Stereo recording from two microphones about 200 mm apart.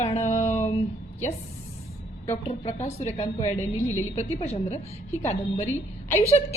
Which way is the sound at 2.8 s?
35° left (ahead or behind).